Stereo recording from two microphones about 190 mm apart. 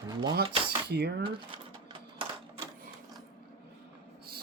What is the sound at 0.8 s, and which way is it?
Speech, 55° right (ahead or behind).